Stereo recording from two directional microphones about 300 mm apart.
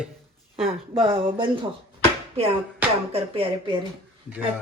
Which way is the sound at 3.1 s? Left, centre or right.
Centre.